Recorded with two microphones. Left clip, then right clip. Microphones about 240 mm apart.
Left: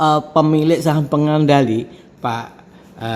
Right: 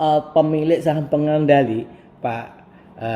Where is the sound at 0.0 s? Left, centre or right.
Left.